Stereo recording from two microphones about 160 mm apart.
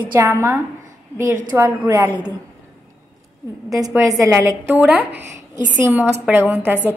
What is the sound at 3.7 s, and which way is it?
A woman's voice, 20° right (ahead or behind).